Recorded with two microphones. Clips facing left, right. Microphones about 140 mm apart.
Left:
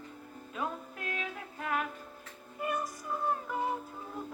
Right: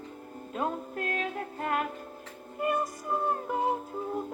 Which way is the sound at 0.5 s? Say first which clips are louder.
Right 6 dB; 45° right (ahead or behind).